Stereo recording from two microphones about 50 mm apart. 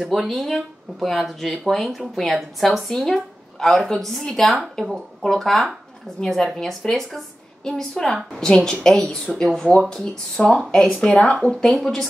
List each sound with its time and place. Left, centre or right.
0.0 s a woman's voice: centre
9.7 s speech: left